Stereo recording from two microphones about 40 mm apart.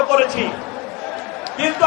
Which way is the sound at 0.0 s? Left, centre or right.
Centre.